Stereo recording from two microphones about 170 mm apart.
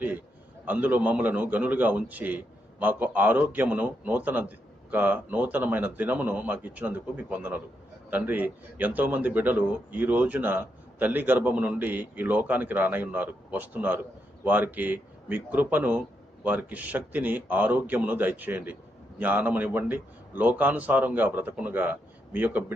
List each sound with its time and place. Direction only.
0.6 s a man's voice: 10° right (ahead or behind)